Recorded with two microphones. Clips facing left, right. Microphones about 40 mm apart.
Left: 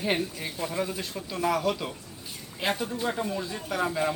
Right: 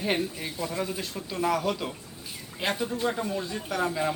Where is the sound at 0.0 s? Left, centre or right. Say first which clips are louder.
Even; centre.